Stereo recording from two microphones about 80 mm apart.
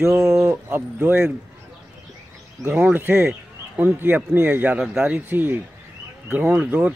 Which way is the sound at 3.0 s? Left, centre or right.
Right.